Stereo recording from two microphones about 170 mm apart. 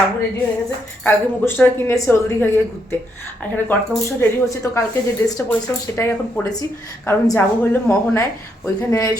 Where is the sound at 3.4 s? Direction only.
10° left (ahead or behind).